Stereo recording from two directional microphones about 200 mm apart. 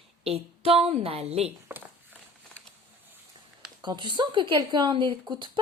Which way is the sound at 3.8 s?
20° right (ahead or behind).